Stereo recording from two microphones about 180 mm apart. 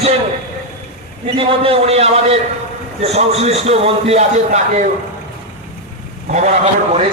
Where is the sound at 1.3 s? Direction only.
30° right (ahead or behind).